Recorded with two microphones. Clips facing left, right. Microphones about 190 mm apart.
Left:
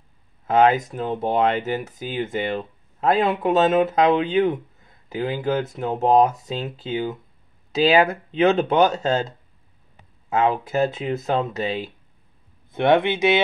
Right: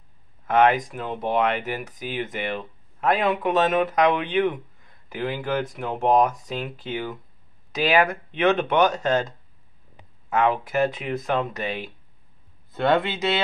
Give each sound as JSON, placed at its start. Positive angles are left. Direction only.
{"t": 0.5, "sound": "speech", "side_deg": 25}
{"t": 10.3, "sound": "speech", "side_deg": 25}